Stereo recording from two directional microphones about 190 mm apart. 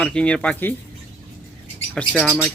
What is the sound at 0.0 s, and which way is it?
Speech, 5° left (ahead or behind).